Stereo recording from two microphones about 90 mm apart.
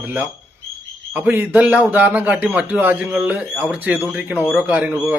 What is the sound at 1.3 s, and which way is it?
A man's voice, 20° right (ahead or behind).